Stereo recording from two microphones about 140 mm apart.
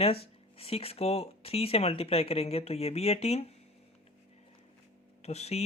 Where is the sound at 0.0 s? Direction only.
45° left (ahead or behind).